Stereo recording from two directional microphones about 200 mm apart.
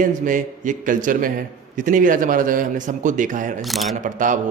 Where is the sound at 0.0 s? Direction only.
40° right (ahead or behind).